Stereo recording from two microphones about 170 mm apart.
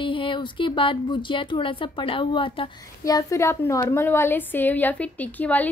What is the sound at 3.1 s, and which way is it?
A woman's voice, 20° left (ahead or behind).